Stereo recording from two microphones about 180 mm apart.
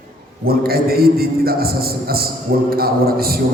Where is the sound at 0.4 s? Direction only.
55° right (ahead or behind).